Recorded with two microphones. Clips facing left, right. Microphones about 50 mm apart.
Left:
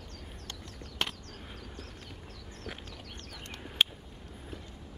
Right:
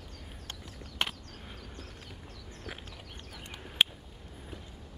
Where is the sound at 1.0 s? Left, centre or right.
Centre.